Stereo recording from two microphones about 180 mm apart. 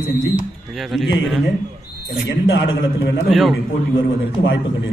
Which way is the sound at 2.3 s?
90° left.